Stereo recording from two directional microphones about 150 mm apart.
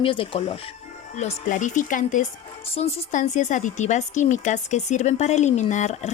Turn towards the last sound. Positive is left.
turn(degrees=50)  # may be behind; listen again after turning